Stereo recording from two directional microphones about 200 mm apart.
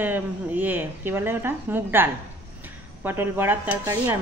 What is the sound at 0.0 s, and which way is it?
Speech, 10° right (ahead or behind).